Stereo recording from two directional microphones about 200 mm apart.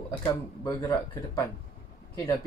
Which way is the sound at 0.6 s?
15° left (ahead or behind).